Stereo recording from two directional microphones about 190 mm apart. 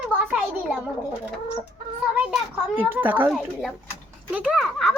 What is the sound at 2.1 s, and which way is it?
Children playing, 10° right (ahead or behind).